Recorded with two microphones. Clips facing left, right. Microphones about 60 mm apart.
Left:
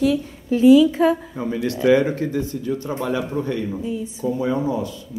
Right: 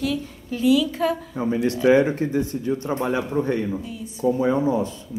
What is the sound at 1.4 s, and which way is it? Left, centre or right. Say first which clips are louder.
Speech: right 2 dB; right.